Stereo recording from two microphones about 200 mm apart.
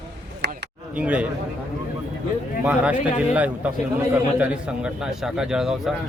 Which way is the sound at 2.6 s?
5° right (ahead or behind).